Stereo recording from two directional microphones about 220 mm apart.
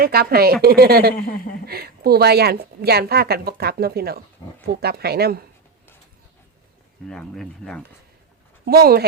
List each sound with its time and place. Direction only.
0.0 s speech: 45° right (ahead or behind)
7.1 s speech: centre (ahead or behind)
8.6 s speech: 45° right (ahead or behind)